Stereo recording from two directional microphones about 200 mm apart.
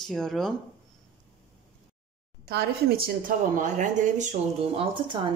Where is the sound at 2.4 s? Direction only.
50° right (ahead or behind).